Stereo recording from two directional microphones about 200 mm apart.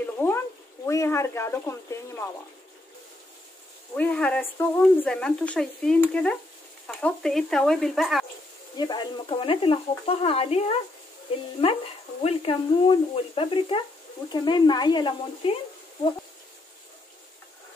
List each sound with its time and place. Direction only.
0.0 s a sound: 10° left (ahead or behind)
0.8 s speech: 15° left (ahead or behind)
3.9 s speech: 5° left (ahead or behind)
8.7 s speech: 20° left (ahead or behind)